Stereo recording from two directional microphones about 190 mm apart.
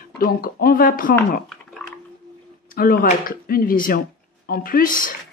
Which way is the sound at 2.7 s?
50° left (ahead or behind).